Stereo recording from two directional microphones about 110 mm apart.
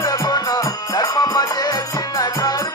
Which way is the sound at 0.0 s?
35° left (ahead or behind).